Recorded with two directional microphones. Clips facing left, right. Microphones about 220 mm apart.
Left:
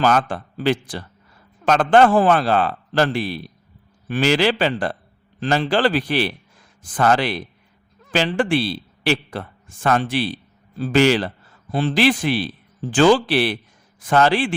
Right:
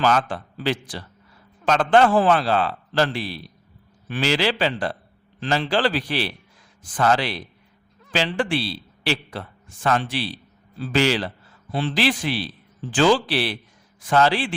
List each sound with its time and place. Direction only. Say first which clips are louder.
0.0 s a man's voice: left 2 dB; 50° left (ahead or behind)